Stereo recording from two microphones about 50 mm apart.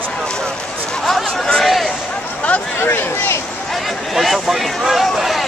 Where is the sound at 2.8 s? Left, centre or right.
Left.